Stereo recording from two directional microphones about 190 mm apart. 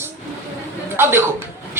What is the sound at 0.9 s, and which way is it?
Speech, 10° right (ahead or behind).